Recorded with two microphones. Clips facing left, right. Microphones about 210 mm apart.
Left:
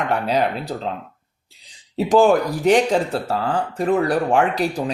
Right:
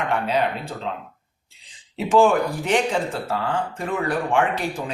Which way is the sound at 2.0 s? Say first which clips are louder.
Left 2 dB; 35° left (ahead or behind).